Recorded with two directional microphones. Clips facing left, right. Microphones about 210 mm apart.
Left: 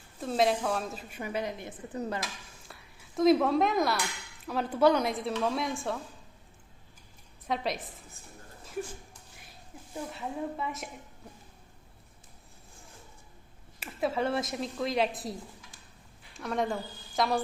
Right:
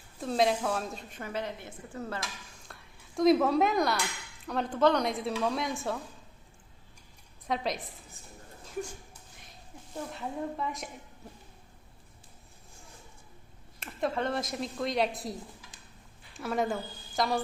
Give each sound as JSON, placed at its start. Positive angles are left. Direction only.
{"t": 0.2, "sound": "a woman's voice", "side_deg": 0}
{"t": 2.2, "sound": "a woman's voice", "side_deg": 5}
{"t": 7.4, "sound": "a woman's voice", "side_deg": 0}
{"t": 8.6, "sound": "a sound", "side_deg": 0}
{"t": 9.9, "sound": "a woman's voice", "side_deg": 5}
{"t": 13.7, "sound": "a woman's voice", "side_deg": 5}